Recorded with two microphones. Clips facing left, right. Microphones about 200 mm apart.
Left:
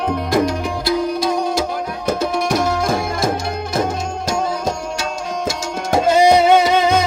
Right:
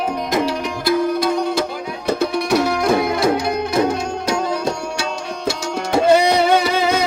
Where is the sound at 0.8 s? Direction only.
55° right (ahead or behind).